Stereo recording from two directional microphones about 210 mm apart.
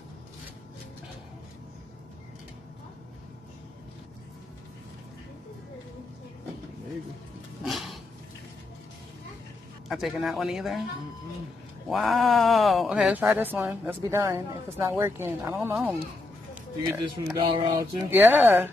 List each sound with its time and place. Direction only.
7.6 s a sound: centre (ahead or behind)
9.8 s speech: centre (ahead or behind)
11.9 s speech: centre (ahead or behind)
17.0 s speech: 20° right (ahead or behind)
17.9 s speech: 10° right (ahead or behind)